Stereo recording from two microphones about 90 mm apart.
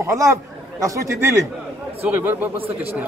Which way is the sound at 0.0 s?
35° right (ahead or behind).